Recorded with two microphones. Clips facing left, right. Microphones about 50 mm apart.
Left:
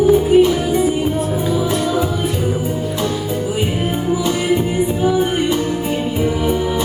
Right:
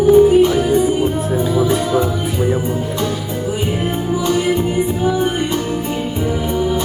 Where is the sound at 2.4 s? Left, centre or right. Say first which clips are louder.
Right 2 dB; right.